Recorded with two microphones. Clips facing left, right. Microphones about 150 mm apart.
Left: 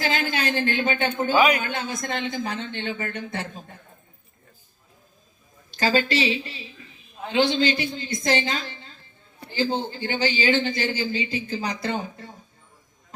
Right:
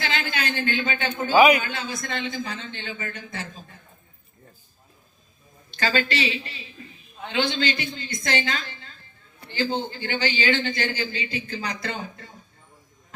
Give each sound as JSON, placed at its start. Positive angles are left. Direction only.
{"t": 0.0, "sound": "a woman's voice", "side_deg": 40}
{"t": 1.4, "sound": "a man's voice", "side_deg": -10}
{"t": 1.6, "sound": "a man's voice", "side_deg": 50}
{"t": 5.7, "sound": "a woman's voice", "side_deg": 35}
{"t": 9.9, "sound": "a woman's voice", "side_deg": 35}